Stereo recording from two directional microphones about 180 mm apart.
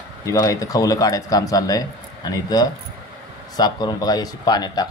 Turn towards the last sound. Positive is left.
turn(degrees=20)  # may be behind; listen again after turning